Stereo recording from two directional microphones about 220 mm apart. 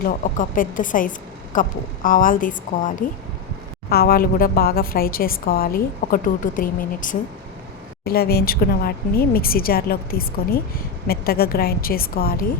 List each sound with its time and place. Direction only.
0.3 s a woman's voice: 40° left (ahead or behind)